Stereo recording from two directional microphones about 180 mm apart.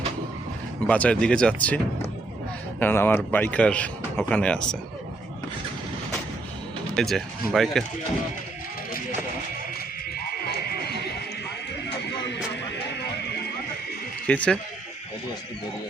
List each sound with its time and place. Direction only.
0.9 s speech: 5° left (ahead or behind)
6.9 s speech: centre (ahead or behind)
10.2 s a sound: 60° left (ahead or behind)
12.0 s music: 75° left (ahead or behind)
14.3 s speech: 5° left (ahead or behind)